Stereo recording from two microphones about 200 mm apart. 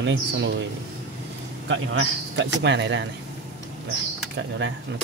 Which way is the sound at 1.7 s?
75° right (ahead or behind).